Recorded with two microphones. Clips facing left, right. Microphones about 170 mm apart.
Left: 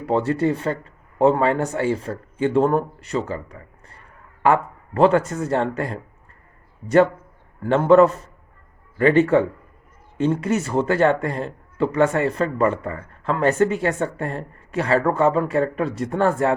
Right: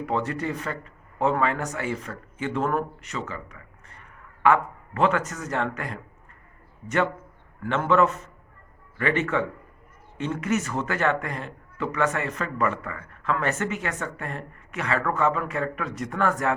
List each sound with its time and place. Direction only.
0.0 s a man's voice: 30° left (ahead or behind)